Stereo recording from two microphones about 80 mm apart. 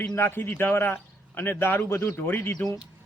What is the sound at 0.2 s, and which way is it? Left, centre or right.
A man's voice, left.